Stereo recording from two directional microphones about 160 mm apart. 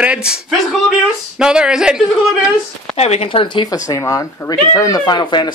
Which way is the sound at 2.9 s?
40° left (ahead or behind).